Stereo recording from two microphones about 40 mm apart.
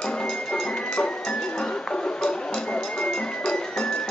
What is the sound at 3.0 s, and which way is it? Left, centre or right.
Music, left.